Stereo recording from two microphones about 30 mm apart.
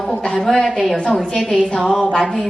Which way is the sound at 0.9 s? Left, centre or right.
Left.